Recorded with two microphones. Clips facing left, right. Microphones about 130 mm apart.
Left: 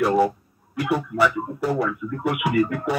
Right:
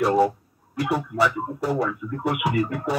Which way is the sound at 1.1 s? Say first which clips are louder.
Left 1 dB; 35° right (ahead or behind).